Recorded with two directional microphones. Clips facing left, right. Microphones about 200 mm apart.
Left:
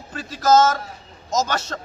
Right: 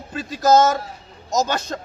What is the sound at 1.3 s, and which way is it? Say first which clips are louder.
Speech: right 1 dB; 15° right (ahead or behind).